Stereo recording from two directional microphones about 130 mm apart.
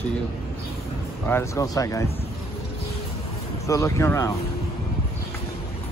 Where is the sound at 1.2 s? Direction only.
20° left (ahead or behind).